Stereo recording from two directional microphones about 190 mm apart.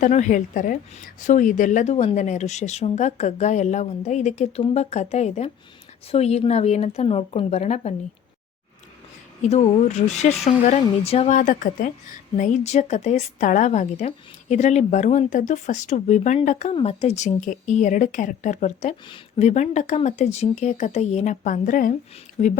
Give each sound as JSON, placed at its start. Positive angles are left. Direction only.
{"t": 0.0, "sound": "a woman's voice", "side_deg": 40}
{"t": 9.4, "sound": "a woman's voice", "side_deg": 35}